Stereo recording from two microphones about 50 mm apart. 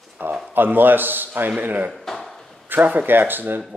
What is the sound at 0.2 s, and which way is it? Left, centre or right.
Speech, right.